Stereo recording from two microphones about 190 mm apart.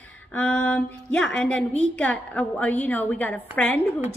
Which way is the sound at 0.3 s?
5° left (ahead or behind).